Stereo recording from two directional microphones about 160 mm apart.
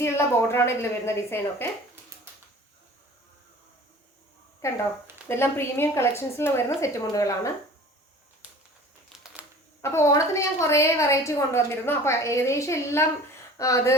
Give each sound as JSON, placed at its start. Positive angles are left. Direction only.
{"t": 0.0, "sound": "a woman's voice", "side_deg": 15}
{"t": 4.6, "sound": "a woman's voice", "side_deg": 20}
{"t": 8.4, "sound": "a sound", "side_deg": -10}
{"t": 9.0, "sound": "typing", "side_deg": -5}
{"t": 9.8, "sound": "a woman's voice", "side_deg": 15}